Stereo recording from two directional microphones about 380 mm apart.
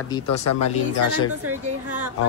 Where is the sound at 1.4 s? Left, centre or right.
Right.